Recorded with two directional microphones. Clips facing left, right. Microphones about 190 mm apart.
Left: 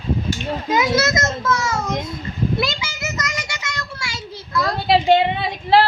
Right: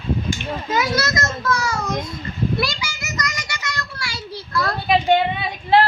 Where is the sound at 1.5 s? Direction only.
25° left (ahead or behind).